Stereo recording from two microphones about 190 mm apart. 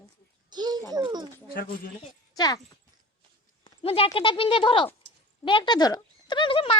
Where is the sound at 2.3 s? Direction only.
20° left (ahead or behind).